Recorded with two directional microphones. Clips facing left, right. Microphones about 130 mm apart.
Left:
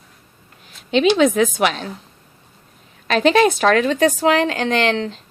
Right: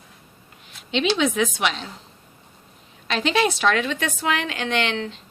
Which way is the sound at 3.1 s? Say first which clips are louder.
Left 7 dB; 45° left (ahead or behind).